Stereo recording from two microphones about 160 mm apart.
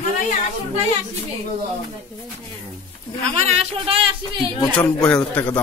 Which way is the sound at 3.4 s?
40° right (ahead or behind).